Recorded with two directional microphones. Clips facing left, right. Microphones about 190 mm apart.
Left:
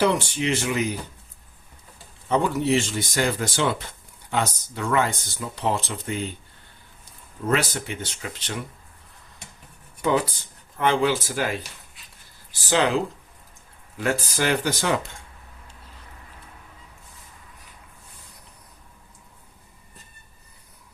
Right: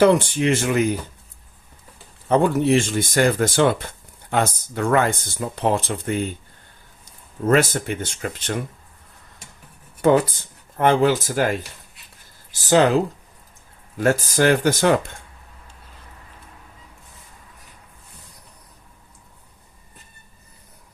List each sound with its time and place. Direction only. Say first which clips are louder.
0.0 s speech: right 6 dB; 50° right (ahead or behind)
2.3 s speech: right 4 dB; 55° right (ahead or behind)
7.4 s speech: right 6 dB; 50° right (ahead or behind)
10.0 s speech: right 6 dB; 50° right (ahead or behind)
14.0 s speech: right 6 dB; 45° right (ahead or behind)